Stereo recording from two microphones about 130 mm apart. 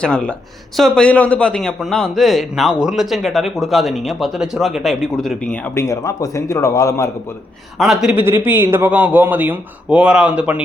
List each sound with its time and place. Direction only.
0.0 s a man's voice: 5° left (ahead or behind)
5.7 s a man's voice: 20° left (ahead or behind)
7.8 s a man's voice: centre (ahead or behind)
8.1 s a man's voice: 15° right (ahead or behind)